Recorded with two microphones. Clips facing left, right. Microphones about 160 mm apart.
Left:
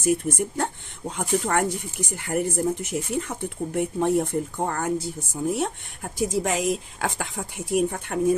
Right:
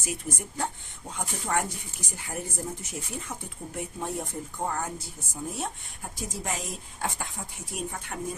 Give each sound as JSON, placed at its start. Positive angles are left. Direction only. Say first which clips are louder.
{"t": 0.0, "sound": "speech", "louder": "left 12 dB", "side_deg": 60}
{"t": 6.1, "sound": "speech", "louder": "left 11 dB", "side_deg": 80}